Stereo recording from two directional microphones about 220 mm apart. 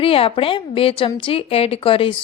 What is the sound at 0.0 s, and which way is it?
Speech, 25° left (ahead or behind).